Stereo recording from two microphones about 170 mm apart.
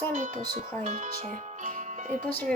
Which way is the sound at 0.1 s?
45° right (ahead or behind).